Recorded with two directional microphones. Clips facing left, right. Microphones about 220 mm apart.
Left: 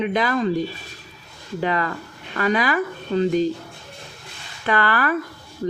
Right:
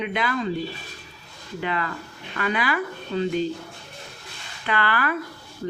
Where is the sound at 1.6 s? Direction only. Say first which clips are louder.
Left 5 dB; 40° left (ahead or behind).